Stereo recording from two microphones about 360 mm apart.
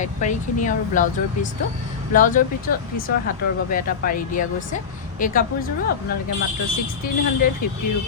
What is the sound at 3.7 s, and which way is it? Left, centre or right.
Speech, left.